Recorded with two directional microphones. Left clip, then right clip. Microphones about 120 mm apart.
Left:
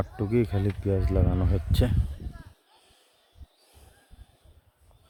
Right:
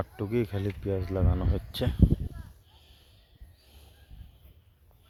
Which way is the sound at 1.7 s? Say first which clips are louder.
Left 3 dB; 35° left (ahead or behind).